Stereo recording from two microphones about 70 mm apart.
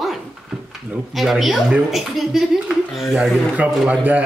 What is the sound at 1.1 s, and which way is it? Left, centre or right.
A child's voice, centre.